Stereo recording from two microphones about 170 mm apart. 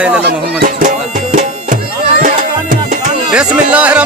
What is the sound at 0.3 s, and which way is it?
Music, 60° right (ahead or behind).